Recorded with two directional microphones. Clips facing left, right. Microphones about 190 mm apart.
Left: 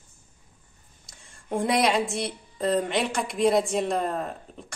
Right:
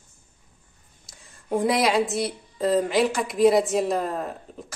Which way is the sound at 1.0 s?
Centre (ahead or behind).